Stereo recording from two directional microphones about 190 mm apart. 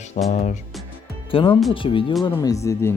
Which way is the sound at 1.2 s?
25° left (ahead or behind).